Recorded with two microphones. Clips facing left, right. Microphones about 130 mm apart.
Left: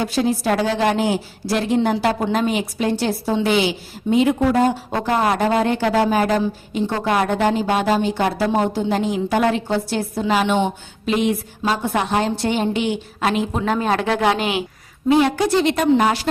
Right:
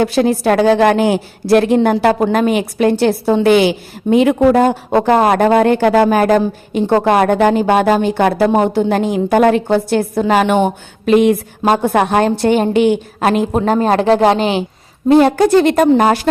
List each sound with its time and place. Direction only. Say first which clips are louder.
0.0 s a woman's voice: right 7 dB; 65° right (ahead or behind); by 16.3 s 50° right (ahead or behind)